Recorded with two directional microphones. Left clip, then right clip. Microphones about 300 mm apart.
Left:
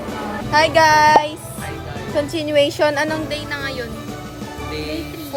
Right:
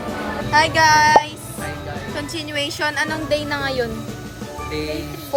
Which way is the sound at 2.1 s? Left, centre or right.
Left.